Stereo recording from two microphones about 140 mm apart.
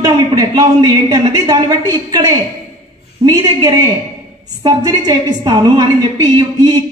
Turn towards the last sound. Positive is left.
turn(degrees=-30)  # may be behind; listen again after turning